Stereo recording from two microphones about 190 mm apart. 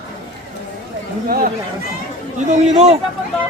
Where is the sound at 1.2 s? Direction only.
50° right (ahead or behind).